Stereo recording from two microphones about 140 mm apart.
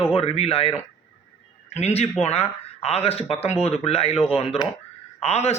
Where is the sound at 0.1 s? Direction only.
45° left (ahead or behind).